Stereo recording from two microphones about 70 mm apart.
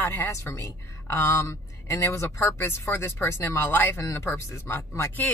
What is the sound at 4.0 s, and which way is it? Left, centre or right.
Speech, left.